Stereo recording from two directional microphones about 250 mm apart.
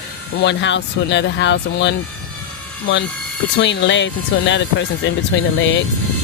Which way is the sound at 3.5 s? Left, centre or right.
Left.